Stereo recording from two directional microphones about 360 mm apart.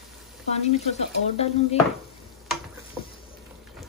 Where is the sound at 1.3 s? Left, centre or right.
Centre.